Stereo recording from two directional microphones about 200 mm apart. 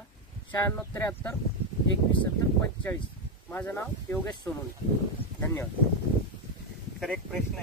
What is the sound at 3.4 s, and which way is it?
Speech, 10° left (ahead or behind).